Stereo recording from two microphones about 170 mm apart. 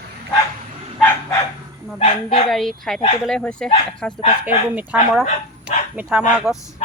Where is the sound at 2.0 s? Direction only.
40° left (ahead or behind).